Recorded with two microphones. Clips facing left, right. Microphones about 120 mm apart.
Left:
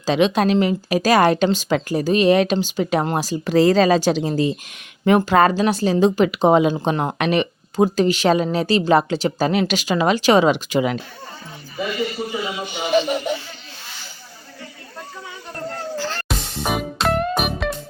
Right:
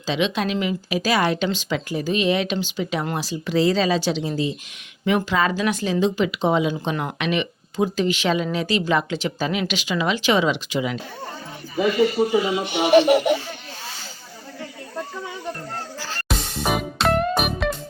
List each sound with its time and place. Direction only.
0.0 s speech: 40° left (ahead or behind)
12.6 s music: 70° right (ahead or behind)
16.0 s music: centre (ahead or behind)